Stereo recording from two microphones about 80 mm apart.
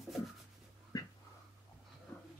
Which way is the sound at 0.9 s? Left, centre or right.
Left.